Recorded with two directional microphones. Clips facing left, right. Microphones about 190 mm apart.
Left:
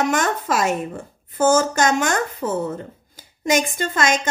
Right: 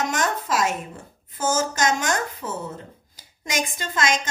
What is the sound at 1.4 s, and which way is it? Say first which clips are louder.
A woman's voice: left 6 dB; 55° left (ahead or behind).